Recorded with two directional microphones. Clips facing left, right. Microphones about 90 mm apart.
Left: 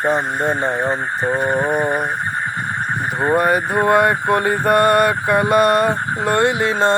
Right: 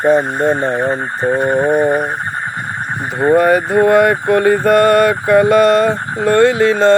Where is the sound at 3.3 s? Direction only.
20° left (ahead or behind).